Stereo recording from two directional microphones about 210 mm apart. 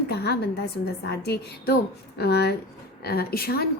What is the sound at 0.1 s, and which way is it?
A woman's voice, 50° left (ahead or behind).